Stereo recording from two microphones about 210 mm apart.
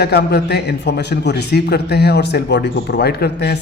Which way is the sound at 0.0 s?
50° left (ahead or behind).